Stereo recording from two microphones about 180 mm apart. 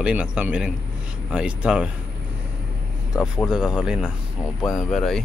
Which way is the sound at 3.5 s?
5° right (ahead or behind).